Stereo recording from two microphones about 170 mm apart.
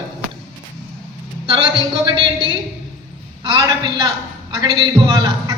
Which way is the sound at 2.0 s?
30° right (ahead or behind).